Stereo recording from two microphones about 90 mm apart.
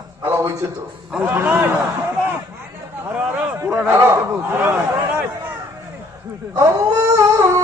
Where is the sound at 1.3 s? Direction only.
20° right (ahead or behind).